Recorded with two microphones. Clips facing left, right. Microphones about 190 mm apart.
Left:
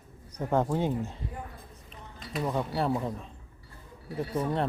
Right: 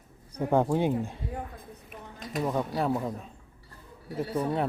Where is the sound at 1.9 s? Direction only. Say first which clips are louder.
Right 2 dB; 45° right (ahead or behind).